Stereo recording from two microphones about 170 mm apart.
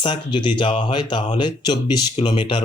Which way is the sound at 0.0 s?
30° left (ahead or behind).